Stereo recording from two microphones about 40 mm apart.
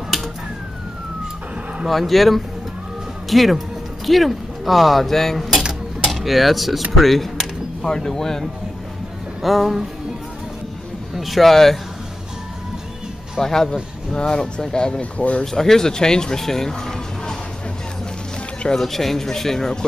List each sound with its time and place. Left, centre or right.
1.9 s speech: centre
7.8 s speech: centre
9.4 s speech: centre
11.1 s speech: centre
13.4 s speech: centre; by 15.4 s left
15.4 s speech: centre
18.8 s speech: centre